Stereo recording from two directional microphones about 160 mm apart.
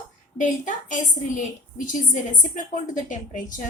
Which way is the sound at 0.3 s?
50° left (ahead or behind).